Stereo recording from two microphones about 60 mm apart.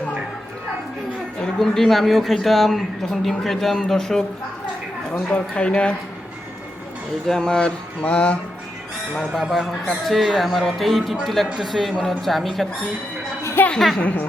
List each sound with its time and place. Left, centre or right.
1.4 s a man's voice: centre
5.3 s speech: centre
7.3 s a sound: centre
9.1 s a sound: centre
9.4 s a man's voice: centre
13.6 s a woman's voice: left